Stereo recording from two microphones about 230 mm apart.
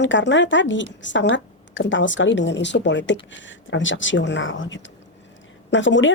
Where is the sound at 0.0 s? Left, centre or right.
Left.